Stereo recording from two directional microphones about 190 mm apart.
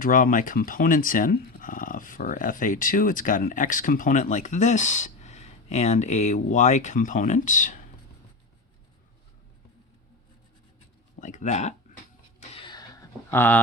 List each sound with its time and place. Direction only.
0.0 s speech: 45° left (ahead or behind)
11.2 s speech: 40° left (ahead or behind)
12.4 s a sound: 25° left (ahead or behind)
13.3 s speech: 10° left (ahead or behind)